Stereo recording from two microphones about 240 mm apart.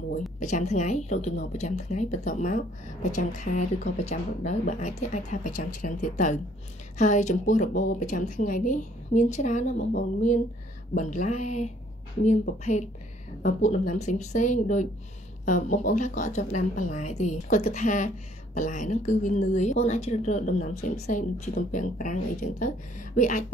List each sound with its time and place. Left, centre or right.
0.4 s a woman's voice: left